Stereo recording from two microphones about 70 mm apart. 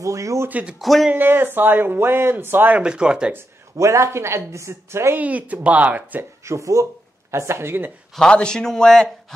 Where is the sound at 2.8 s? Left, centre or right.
Centre.